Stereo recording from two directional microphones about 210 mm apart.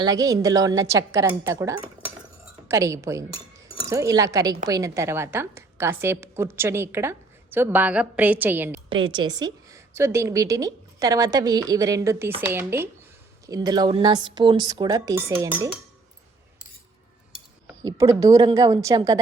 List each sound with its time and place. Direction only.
0.0 s a woman's voice: 15° right (ahead or behind)
8.9 s a woman's voice: 20° right (ahead or behind)
17.8 s a woman's voice: 15° right (ahead or behind)